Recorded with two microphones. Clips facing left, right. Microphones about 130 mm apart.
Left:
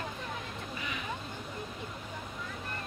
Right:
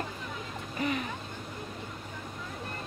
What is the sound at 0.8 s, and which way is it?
Speech, 45° right (ahead or behind).